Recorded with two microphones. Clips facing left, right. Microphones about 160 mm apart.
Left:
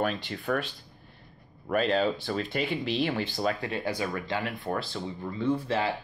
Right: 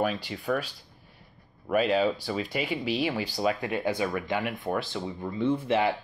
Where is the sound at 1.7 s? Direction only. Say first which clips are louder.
Right 1 dB; 5° right (ahead or behind).